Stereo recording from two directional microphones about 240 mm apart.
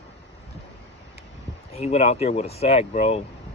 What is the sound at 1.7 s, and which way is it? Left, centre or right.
Speech, left.